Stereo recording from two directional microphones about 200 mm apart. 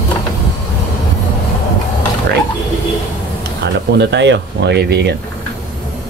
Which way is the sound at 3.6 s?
60° right (ahead or behind).